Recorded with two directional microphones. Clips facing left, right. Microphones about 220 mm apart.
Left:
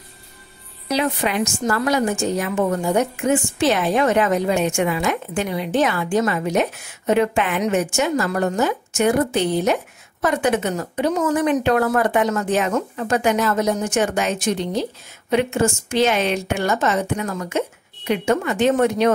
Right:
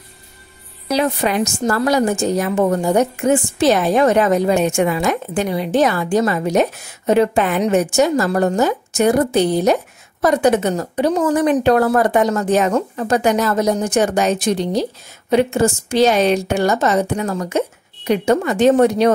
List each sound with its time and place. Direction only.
0.8 s a woman's voice: 40° right (ahead or behind)